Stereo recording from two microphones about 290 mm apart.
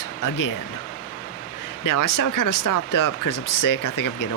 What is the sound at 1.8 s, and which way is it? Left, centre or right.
Speech, left.